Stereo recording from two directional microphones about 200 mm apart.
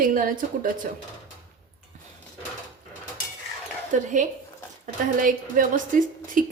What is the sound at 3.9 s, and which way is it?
A woman's voice, 40° right (ahead or behind).